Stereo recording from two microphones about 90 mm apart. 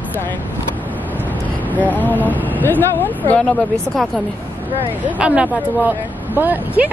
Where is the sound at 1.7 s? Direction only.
20° left (ahead or behind).